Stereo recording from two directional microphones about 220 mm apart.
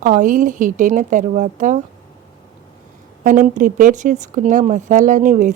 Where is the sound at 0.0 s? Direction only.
35° right (ahead or behind).